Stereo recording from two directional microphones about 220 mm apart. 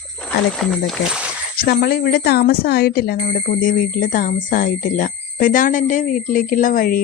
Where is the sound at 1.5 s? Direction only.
40° left (ahead or behind).